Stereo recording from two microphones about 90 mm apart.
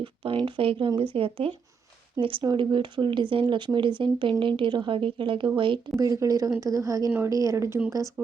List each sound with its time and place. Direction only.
0.0 s speech: 75° right (ahead or behind); by 1.5 s 90° right
2.2 s a woman's voice: 75° right (ahead or behind)
2.5 s speech: 60° right (ahead or behind)
4.9 s a woman's voice: 85° right; by 5.8 s 70° right (ahead or behind)
6.0 s speech: 40° right (ahead or behind)